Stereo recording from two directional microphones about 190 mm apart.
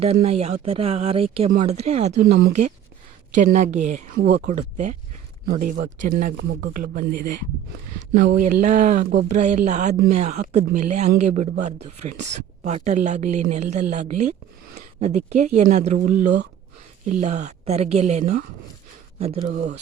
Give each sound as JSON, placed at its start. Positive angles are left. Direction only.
{"t": 0.0, "sound": "speech", "side_deg": -30}
{"t": 2.2, "sound": "speech", "side_deg": -50}
{"t": 2.5, "sound": "speech", "side_deg": -35}
{"t": 4.2, "sound": "speech", "side_deg": -60}
{"t": 4.4, "sound": "speech", "side_deg": -40}
{"t": 8.4, "sound": "speech", "side_deg": -40}
{"t": 19.5, "sound": "speech", "side_deg": -55}